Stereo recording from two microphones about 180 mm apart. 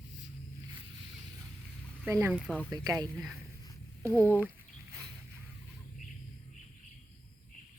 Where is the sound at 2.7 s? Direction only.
20° right (ahead or behind).